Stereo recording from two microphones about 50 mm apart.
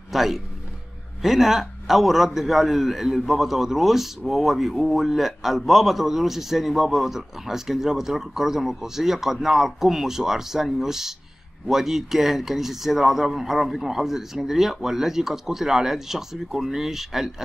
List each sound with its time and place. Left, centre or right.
0.1 s a man's voice: centre